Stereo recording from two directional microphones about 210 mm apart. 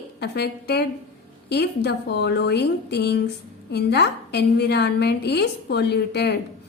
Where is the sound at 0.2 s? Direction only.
50° left (ahead or behind).